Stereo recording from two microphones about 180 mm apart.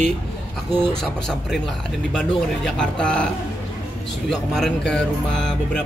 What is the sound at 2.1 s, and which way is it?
Speech, 5° left (ahead or behind).